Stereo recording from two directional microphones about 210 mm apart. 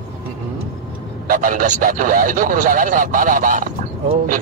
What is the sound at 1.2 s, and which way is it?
A man's voice, 40° right (ahead or behind).